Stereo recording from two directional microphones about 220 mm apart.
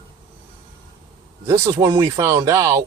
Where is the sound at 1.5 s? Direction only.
15° right (ahead or behind).